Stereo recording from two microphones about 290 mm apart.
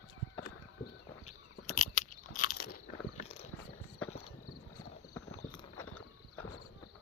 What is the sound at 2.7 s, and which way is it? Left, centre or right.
Biting, left.